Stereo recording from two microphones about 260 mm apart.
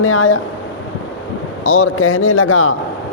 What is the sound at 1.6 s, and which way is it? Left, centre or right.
Speech, left.